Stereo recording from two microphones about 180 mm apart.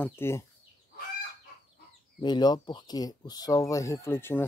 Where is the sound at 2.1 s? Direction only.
25° left (ahead or behind).